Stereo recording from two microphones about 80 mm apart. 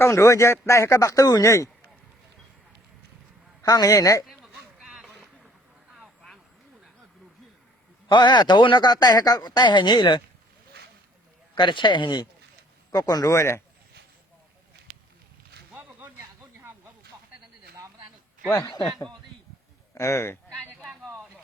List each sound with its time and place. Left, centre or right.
0.0 s speech: left
1.5 s speech: left
3.6 s speech: left
4.8 s a sound: centre
8.1 s speech: left
11.5 s speech: left
12.9 s speech: left
15.7 s a sound: right
18.5 s speech: left
19.9 s speech: left